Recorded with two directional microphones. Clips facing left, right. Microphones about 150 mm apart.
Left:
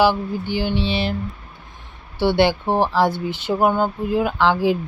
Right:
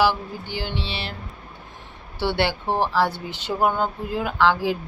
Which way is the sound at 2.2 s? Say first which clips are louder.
Left 6 dB; 15° left (ahead or behind).